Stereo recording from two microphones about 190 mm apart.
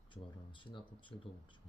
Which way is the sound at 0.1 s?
25° left (ahead or behind).